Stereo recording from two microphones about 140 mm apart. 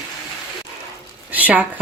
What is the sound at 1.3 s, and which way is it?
Speech, 10° right (ahead or behind).